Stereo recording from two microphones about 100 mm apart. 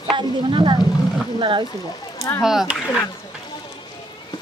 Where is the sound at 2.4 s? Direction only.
5° right (ahead or behind).